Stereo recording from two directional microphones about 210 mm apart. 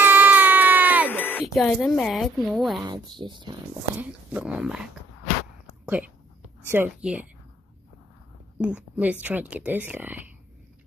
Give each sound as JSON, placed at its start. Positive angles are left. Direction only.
{"t": 0.0, "sound": "a sound", "side_deg": -10}
{"t": 1.1, "sound": "speech", "side_deg": 10}
{"t": 2.8, "sound": "speech", "side_deg": -20}
{"t": 3.9, "sound": "speech", "side_deg": -5}
{"t": 5.9, "sound": "speech", "side_deg": -5}
{"t": 8.5, "sound": "speech", "side_deg": -5}